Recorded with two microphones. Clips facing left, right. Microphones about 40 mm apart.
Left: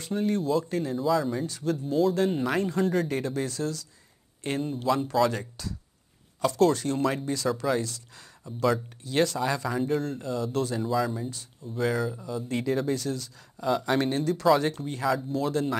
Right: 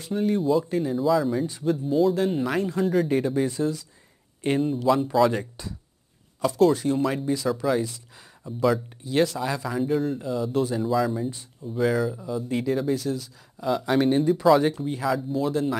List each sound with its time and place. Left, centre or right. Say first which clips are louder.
0.0 s speech: right 3 dB; centre
1.4 s speech: right 4 dB; centre
3.4 s speech: right 5 dB; right
5.6 s speech: even; right
6.4 s speech: right 3 dB; centre
7.8 s speech: right 4 dB; centre
11.2 s speech: right 5 dB; right
11.7 s speech: right 4 dB; centre
14.1 s speech: right 6 dB; centre
14.4 s speech: right 1 dB; centre